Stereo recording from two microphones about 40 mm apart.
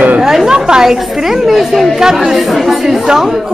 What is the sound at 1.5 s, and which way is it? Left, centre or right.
Speech, centre.